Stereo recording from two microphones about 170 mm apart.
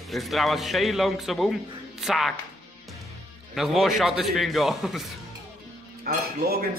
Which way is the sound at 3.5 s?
Centre (ahead or behind).